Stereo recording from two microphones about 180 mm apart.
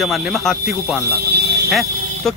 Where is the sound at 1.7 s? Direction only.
Centre (ahead or behind).